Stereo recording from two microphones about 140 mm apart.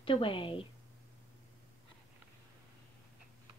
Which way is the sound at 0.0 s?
40° left (ahead or behind).